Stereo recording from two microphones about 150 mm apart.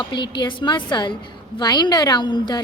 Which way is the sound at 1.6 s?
30° left (ahead or behind).